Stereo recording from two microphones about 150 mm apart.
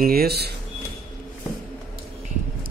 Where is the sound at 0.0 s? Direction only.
90° right.